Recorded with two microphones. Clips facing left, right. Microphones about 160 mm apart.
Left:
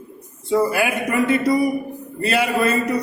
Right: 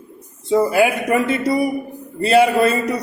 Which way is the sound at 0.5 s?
20° right (ahead or behind).